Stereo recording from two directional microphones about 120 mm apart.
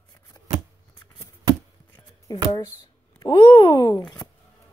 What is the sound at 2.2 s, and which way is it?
A child's voice, 40° left (ahead or behind).